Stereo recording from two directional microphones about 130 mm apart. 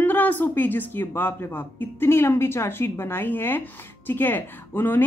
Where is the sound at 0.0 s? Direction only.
15° left (ahead or behind).